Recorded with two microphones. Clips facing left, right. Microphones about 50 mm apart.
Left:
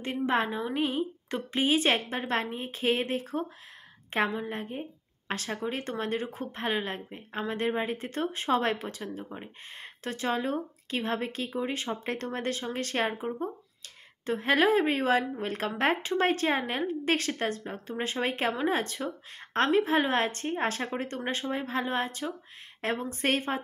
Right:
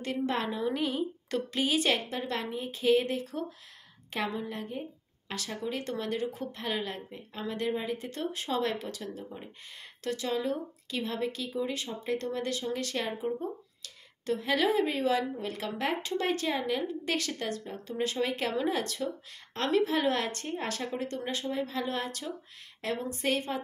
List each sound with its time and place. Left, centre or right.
0.0 s a woman's voice: left